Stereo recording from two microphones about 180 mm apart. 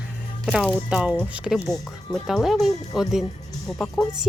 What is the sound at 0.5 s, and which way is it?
Speech, 5° right (ahead or behind).